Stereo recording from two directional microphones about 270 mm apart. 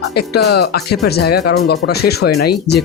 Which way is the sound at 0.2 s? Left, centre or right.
Left.